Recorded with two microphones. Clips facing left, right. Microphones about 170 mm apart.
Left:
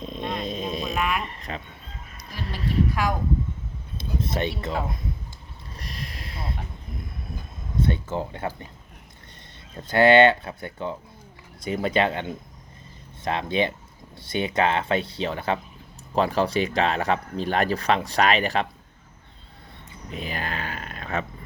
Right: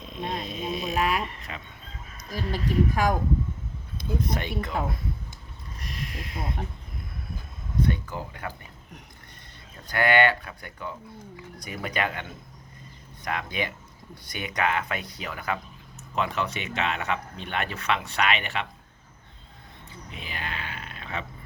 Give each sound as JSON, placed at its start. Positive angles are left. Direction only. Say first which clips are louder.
{"t": 0.0, "sound": "vehicle", "louder": "left 3 dB", "side_deg": 35}
{"t": 0.7, "sound": "a sound", "louder": "left 1 dB", "side_deg": 35}
{"t": 1.4, "sound": "speech", "louder": "left 5 dB", "side_deg": 35}
{"t": 2.3, "sound": "a woman's voice", "louder": "right 1 dB", "side_deg": -45}
{"t": 3.9, "sound": "speech", "louder": "left 1 dB", "side_deg": 25}
{"t": 5.7, "sound": "a sound", "louder": "right 1 dB", "side_deg": 35}
{"t": 7.8, "sound": "speech", "louder": "left 2 dB", "side_deg": 25}
{"t": 9.7, "sound": "speech", "louder": "left 7 dB", "side_deg": 25}
{"t": 13.2, "sound": "speech", "louder": "left 6 dB", "side_deg": 25}
{"t": 20.1, "sound": "a sound", "louder": "left 6 dB", "side_deg": 40}